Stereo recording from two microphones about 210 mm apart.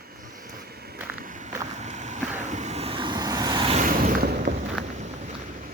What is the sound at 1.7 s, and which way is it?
Vehicle, 35° right (ahead or behind).